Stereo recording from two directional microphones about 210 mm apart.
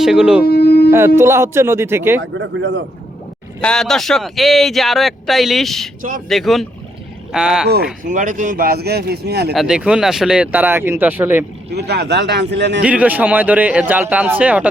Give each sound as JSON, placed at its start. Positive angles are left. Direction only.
{"t": 0.0, "sound": "a man's voice", "side_deg": 0}
{"t": 0.4, "sound": "a sound", "side_deg": 50}
{"t": 0.9, "sound": "a man's voice", "side_deg": -10}
{"t": 3.6, "sound": "a man's voice", "side_deg": 5}
{"t": 6.0, "sound": "speech", "side_deg": -40}
{"t": 6.2, "sound": "a man's voice", "side_deg": 0}
{"t": 8.0, "sound": "speech", "side_deg": -40}
{"t": 9.6, "sound": "a man's voice", "side_deg": -5}
{"t": 11.7, "sound": "speech", "side_deg": -50}
{"t": 12.8, "sound": "a man's voice", "side_deg": -5}